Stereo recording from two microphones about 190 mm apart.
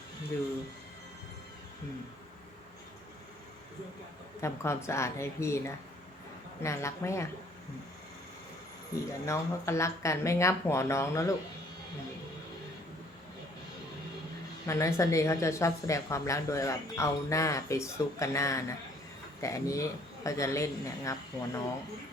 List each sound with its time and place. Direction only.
4.4 s a woman's voice: 15° left (ahead or behind)
9.2 s a woman's voice: 15° left (ahead or behind)
14.7 s a woman's voice: 15° left (ahead or behind)